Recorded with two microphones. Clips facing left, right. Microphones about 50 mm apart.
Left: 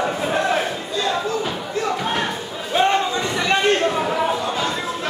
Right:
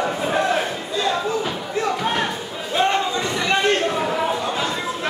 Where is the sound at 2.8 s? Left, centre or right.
Centre.